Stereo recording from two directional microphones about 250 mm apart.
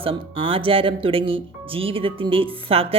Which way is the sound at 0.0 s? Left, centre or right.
Right.